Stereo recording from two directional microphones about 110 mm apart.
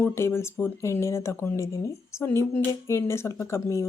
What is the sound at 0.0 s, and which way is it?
Speech, 20° left (ahead or behind).